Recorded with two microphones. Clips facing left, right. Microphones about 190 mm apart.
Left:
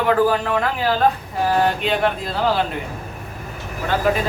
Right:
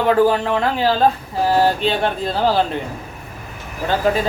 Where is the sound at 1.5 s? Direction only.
30° right (ahead or behind).